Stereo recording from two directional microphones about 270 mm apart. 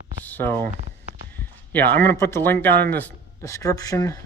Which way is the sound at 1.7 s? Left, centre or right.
Centre.